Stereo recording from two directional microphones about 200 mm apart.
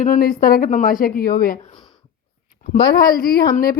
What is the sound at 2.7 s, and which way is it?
A woman's voice, 50° left (ahead or behind).